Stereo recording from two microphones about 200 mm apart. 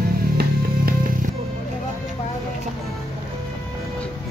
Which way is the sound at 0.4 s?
50° right (ahead or behind).